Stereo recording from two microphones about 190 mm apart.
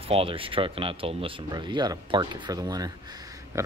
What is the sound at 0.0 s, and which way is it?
Speech, 30° right (ahead or behind).